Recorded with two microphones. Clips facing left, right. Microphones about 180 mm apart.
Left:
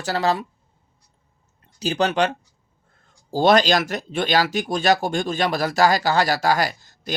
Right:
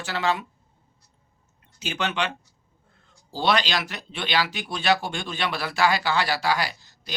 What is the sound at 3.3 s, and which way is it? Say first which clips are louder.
Speech: left 8 dB; 45° left (ahead or behind).